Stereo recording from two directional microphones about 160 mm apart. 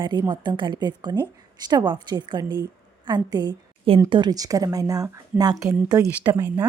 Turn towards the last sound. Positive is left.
turn(degrees=-20)  # may be behind; listen again after turning